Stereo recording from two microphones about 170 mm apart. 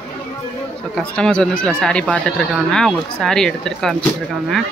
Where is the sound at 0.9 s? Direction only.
5° left (ahead or behind).